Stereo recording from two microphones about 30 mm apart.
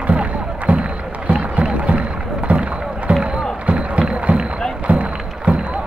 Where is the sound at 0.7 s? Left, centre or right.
Right.